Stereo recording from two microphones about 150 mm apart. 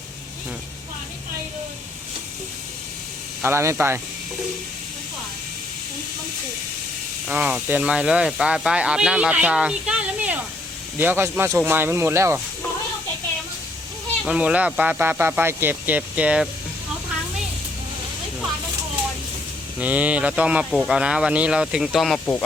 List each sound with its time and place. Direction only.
3.4 s speech: 20° right (ahead or behind)
7.3 s speech: 10° right (ahead or behind)
14.3 s speech: 5° right (ahead or behind)
19.8 s speech: 10° right (ahead or behind)